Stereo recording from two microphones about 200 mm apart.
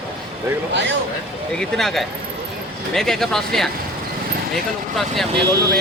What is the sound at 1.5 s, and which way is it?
Speech, centre (ahead or behind).